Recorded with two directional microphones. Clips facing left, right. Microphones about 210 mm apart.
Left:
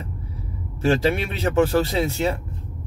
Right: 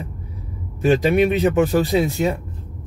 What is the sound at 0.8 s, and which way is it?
A man's voice, 15° right (ahead or behind).